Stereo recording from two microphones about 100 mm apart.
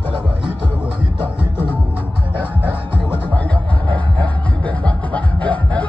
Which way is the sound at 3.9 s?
15° left (ahead or behind).